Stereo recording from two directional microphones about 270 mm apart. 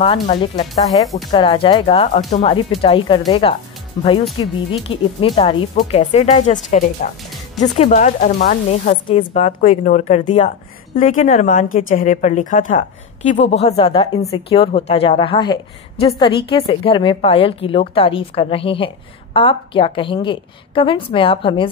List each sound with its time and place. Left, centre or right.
0.0 s speech: centre